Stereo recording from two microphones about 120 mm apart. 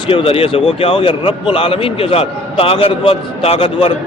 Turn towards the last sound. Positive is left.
turn(degrees=50)  # may be behind; listen again after turning